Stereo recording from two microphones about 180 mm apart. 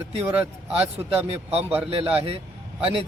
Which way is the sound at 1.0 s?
35° right (ahead or behind).